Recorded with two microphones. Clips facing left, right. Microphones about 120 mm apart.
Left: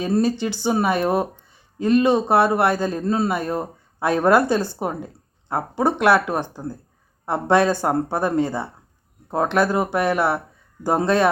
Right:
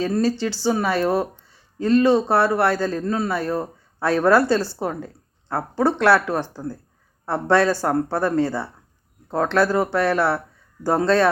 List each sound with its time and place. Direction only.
0.2 s speech: 20° left (ahead or behind)